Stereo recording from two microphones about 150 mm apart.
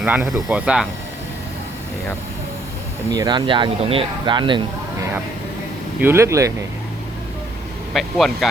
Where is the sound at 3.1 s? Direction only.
30° right (ahead or behind).